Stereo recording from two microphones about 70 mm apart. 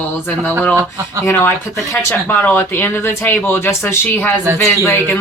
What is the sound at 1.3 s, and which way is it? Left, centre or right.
Speech, left.